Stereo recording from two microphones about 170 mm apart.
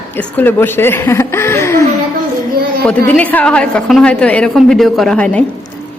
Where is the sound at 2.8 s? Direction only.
10° left (ahead or behind).